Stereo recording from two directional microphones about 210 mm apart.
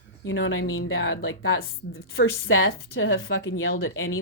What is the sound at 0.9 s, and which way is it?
A woman's voice, 55° left (ahead or behind).